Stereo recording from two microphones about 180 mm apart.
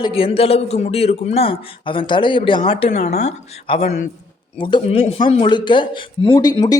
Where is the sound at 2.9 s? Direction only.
50° left (ahead or behind).